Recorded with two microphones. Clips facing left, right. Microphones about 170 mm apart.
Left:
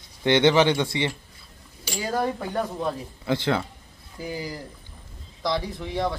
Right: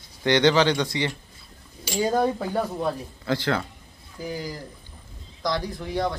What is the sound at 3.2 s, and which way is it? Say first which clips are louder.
Speech: left 1 dB; 20° left (ahead or behind).